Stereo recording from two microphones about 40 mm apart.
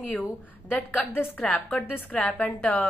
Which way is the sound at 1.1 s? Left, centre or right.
Left.